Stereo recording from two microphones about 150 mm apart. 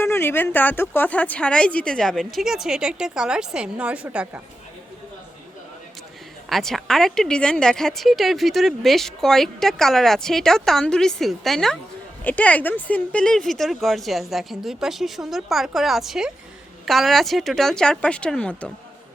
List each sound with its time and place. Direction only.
0.0 s speech: 15° left (ahead or behind); by 4.3 s 10° right (ahead or behind)
6.5 s speech: centre (ahead or behind)